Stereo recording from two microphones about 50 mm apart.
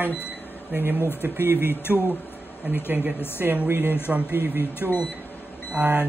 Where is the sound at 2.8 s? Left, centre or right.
Right.